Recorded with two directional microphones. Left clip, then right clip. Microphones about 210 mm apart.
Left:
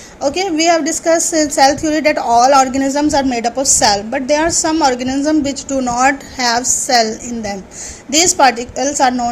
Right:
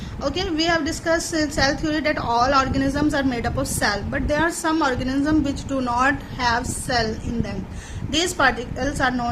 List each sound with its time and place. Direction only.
0.2 s a woman's voice: 25° left (ahead or behind)